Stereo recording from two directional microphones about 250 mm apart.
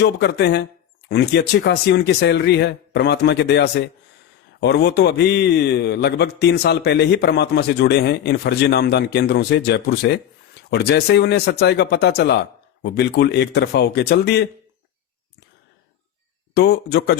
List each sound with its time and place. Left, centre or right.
0.0 s a man's voice: left
16.6 s a man's voice: left